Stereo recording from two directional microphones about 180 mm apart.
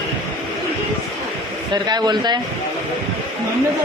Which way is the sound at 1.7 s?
25° right (ahead or behind).